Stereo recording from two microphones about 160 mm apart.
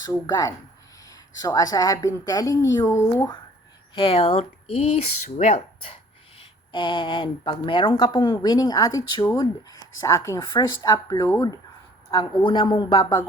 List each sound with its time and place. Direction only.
0.0 s a woman's voice: 20° left (ahead or behind)
3.9 s speech: 35° left (ahead or behind)
6.4 s a woman's voice: 30° left (ahead or behind)